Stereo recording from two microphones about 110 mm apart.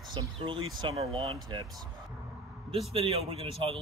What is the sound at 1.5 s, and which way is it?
Speech, 40° right (ahead or behind).